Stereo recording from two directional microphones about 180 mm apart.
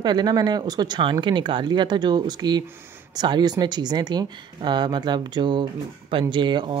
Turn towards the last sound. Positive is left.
turn(degrees=-25)  # may be behind; listen again after turning